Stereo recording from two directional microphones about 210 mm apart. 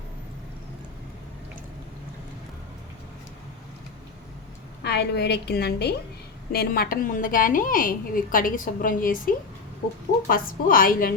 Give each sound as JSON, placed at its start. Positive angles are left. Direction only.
{"t": 4.8, "sound": "a woman's voice", "side_deg": 50}